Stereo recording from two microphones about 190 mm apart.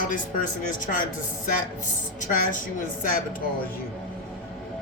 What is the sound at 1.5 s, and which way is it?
A woman's voice, 40° left (ahead or behind).